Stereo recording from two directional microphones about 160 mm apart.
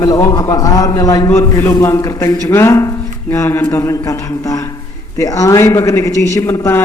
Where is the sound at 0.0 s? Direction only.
20° left (ahead or behind).